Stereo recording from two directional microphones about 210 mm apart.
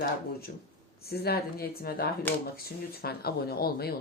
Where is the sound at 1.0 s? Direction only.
50° left (ahead or behind).